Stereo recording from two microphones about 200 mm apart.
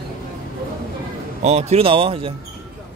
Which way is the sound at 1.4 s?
30° right (ahead or behind).